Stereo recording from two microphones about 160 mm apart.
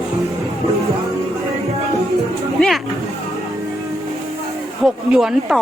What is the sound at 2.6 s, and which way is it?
Speech, centre (ahead or behind).